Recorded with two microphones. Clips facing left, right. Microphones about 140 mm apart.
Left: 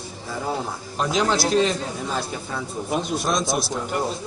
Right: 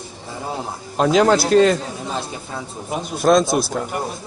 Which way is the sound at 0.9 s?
60° right (ahead or behind).